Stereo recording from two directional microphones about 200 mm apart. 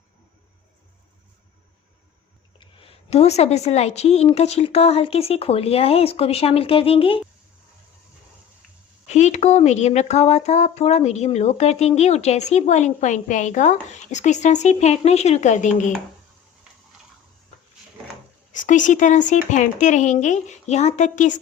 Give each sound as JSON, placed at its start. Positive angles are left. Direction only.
{"t": 2.6, "sound": "a woman's voice", "side_deg": 25}
{"t": 9.0, "sound": "speech", "side_deg": 35}
{"t": 18.5, "sound": "speech", "side_deg": 40}